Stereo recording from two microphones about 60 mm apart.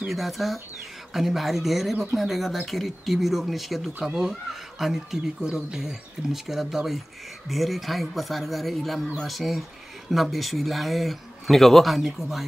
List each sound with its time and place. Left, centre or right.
0.0 s speech: centre